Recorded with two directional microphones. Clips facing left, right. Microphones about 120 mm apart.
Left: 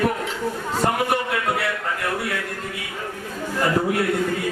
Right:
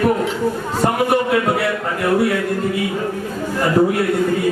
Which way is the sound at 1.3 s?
30° right (ahead or behind).